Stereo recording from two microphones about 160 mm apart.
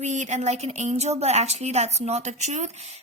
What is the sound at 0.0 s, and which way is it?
A woman's voice, 50° right (ahead or behind).